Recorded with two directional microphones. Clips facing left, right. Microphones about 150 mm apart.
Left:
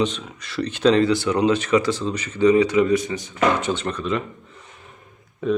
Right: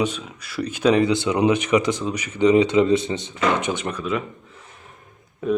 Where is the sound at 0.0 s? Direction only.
5° right (ahead or behind).